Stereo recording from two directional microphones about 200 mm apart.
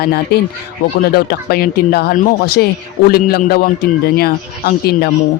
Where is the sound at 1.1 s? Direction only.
50° left (ahead or behind).